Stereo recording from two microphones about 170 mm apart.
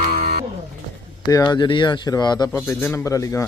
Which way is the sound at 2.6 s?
10° left (ahead or behind).